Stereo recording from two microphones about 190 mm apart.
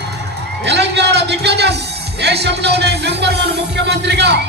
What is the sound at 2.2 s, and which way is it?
Speech, 60° right (ahead or behind).